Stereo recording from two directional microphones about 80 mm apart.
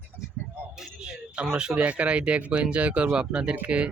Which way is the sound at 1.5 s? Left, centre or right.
Centre.